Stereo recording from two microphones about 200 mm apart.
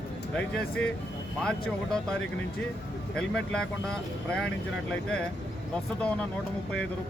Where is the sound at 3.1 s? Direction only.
5° left (ahead or behind).